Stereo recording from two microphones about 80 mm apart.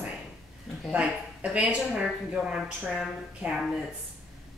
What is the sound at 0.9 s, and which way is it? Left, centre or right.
Speech, centre.